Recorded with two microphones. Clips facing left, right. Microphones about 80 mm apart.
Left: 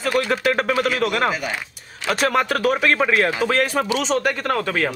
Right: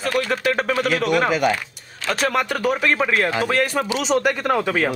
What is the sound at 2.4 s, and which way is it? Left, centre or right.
A man's voice, centre.